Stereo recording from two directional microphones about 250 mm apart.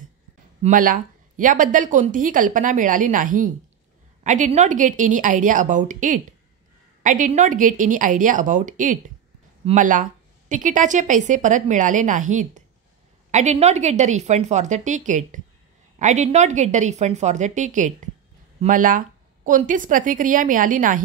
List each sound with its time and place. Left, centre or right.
0.6 s a woman's voice: right